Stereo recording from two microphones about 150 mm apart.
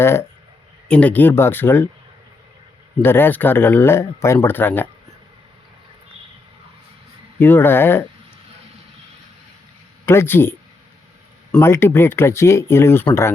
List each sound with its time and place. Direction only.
0.0 s speech: 15° left (ahead or behind)
3.0 s speech: 15° left (ahead or behind)
7.3 s speech: 15° left (ahead or behind)
10.1 s speech: 15° left (ahead or behind)
11.6 s speech: 15° left (ahead or behind)